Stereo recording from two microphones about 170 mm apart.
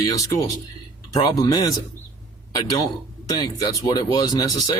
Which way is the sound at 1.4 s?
20° left (ahead or behind).